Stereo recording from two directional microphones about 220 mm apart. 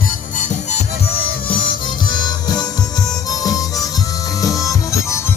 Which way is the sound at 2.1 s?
20° left (ahead or behind).